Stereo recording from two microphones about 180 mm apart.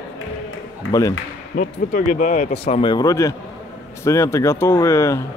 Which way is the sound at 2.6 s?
30° left (ahead or behind).